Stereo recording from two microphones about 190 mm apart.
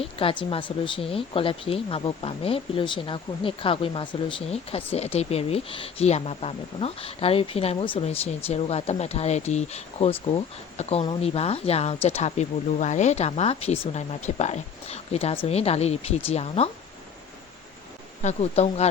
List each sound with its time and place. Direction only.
0.0 s speech: 30° left (ahead or behind)
18.2 s speech: 35° left (ahead or behind)